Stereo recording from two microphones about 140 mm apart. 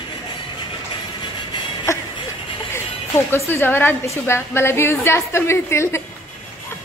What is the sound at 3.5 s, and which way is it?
A woman's voice, 15° left (ahead or behind).